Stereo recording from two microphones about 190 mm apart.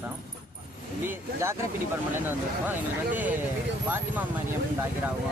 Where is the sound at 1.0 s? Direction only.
15° right (ahead or behind).